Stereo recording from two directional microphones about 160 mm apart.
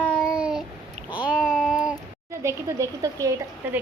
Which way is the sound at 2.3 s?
15° right (ahead or behind).